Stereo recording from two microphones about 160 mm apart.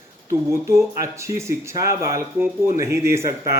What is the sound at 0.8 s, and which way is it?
Speech, 20° right (ahead or behind).